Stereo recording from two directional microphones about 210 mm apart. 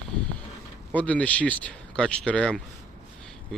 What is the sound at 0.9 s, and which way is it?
Speech, 5° left (ahead or behind).